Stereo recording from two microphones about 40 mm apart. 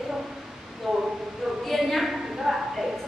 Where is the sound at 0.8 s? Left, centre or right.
Centre.